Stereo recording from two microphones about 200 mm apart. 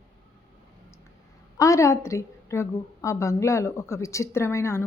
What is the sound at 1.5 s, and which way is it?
A woman's voice, 15° left (ahead or behind).